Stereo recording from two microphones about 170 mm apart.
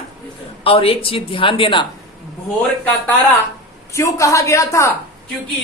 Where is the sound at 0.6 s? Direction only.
35° left (ahead or behind).